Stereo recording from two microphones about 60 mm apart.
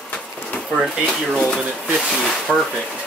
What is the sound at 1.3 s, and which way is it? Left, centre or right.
Speech, centre.